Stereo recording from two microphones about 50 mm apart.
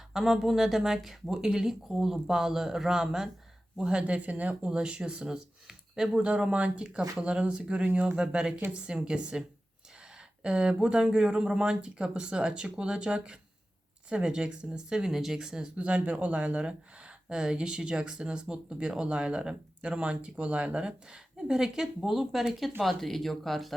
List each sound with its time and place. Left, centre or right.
0.1 s speech: centre; by 8.2 s right
8.2 s speech: centre
15.7 s speech: right; by 23.7 s centre